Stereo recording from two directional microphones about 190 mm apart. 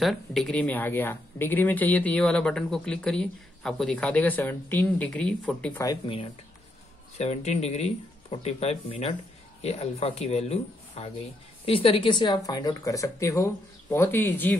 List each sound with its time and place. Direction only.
0.0 s speech: centre (ahead or behind)
7.2 s speech: 35° left (ahead or behind); by 14.6 s 10° left (ahead or behind)